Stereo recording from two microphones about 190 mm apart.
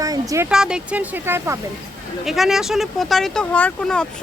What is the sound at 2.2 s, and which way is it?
Speech, centre (ahead or behind).